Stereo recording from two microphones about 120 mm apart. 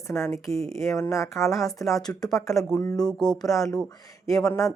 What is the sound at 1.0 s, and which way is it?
Speech, 25° left (ahead or behind).